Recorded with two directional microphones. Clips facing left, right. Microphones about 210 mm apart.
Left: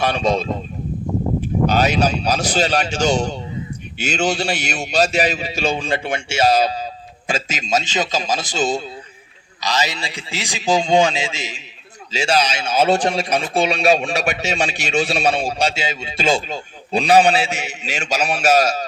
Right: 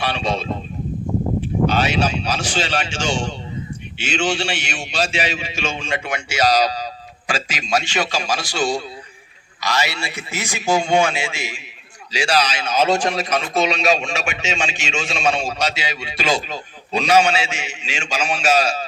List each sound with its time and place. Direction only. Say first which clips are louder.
0.0 s a man's voice: left 4 dB; 45° left (ahead or behind)